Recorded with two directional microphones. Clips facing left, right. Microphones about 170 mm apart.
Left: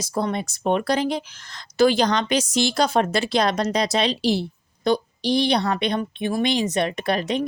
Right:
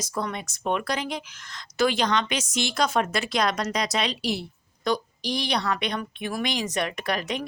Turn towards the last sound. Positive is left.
turn(degrees=30)  # may be behind; listen again after turning